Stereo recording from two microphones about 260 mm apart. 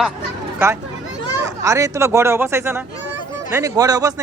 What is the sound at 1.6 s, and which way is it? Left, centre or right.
Speech, centre.